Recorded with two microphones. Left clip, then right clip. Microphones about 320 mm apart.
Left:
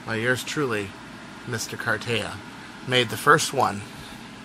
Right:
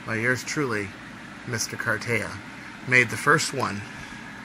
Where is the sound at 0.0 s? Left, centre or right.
Centre.